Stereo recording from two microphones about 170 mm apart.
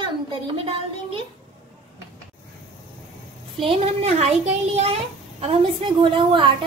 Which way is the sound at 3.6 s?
35° right (ahead or behind).